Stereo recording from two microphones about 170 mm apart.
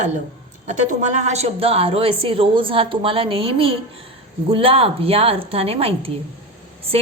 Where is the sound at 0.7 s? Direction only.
45° right (ahead or behind).